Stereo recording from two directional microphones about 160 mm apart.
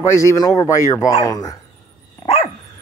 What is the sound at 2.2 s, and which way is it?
Dog, 35° left (ahead or behind).